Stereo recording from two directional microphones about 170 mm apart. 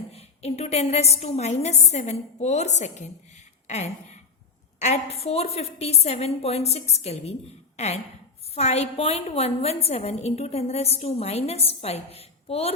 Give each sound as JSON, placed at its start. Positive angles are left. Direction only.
{"t": 0.1, "sound": "a woman's voice", "side_deg": 40}